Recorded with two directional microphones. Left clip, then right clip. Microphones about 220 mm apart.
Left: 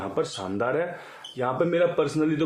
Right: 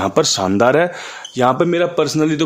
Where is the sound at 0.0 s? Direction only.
55° right (ahead or behind).